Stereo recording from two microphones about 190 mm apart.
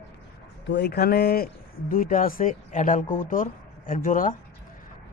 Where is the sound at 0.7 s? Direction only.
60° left (ahead or behind).